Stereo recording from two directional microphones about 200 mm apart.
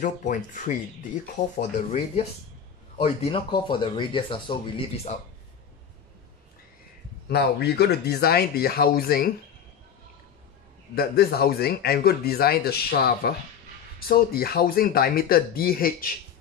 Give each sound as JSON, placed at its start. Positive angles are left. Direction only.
{"t": 0.0, "sound": "speech", "side_deg": 40}
{"t": 7.2, "sound": "speech", "side_deg": 50}
{"t": 11.0, "sound": "speech", "side_deg": 50}